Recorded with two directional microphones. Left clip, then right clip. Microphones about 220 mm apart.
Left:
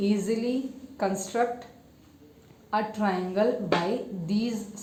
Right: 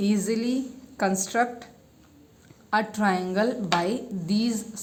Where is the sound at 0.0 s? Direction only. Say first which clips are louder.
Right 1 dB; 25° right (ahead or behind).